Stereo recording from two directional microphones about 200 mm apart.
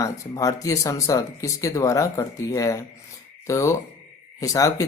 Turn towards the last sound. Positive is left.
turn(degrees=15)  # may be behind; listen again after turning